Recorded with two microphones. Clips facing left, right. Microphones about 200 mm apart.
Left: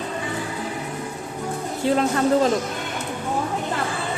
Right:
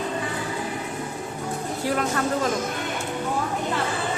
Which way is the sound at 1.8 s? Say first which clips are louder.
Left 5 dB; 25° left (ahead or behind).